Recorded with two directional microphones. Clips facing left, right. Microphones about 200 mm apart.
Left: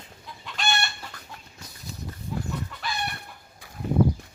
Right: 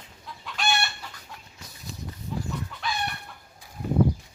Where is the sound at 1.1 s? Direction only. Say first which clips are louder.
Left 3 dB; 55° left (ahead or behind).